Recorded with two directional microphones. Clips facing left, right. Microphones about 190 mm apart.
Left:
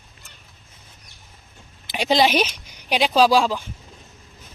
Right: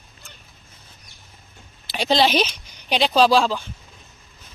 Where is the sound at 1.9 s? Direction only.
15° left (ahead or behind).